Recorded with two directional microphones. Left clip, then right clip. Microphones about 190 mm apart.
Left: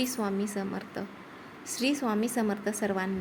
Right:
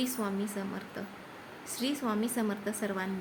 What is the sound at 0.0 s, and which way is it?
A woman's voice, 20° left (ahead or behind).